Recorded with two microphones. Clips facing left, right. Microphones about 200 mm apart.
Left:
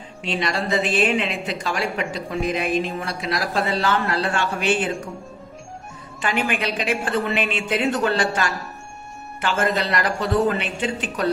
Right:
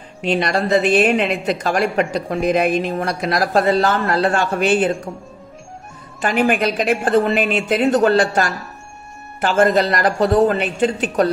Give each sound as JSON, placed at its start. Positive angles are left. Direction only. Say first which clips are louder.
{"t": 0.2, "sound": "a woman's voice", "louder": "right 6 dB", "side_deg": -60}
{"t": 6.2, "sound": "a woman's voice", "louder": "right 7 dB", "side_deg": -45}